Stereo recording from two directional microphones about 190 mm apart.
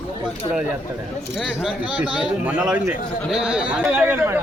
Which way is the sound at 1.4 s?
Centre (ahead or behind).